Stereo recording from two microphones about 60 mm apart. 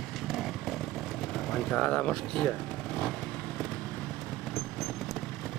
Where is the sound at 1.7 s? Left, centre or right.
Centre.